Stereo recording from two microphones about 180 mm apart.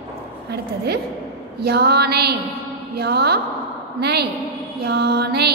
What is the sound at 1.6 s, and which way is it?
A woman's voice, 65° right (ahead or behind).